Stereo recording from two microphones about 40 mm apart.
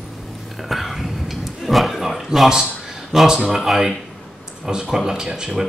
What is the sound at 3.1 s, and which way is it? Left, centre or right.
Speech, centre.